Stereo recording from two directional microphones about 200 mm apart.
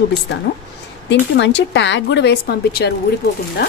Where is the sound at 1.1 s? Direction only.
60° left (ahead or behind).